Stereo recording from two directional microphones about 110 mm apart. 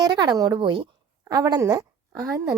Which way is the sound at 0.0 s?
40° right (ahead or behind).